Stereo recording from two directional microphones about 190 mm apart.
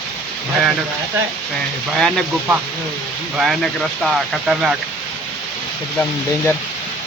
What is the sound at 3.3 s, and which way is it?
Speech, centre (ahead or behind).